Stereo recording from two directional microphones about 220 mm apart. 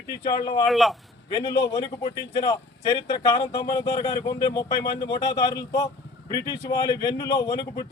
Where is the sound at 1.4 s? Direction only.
15° left (ahead or behind).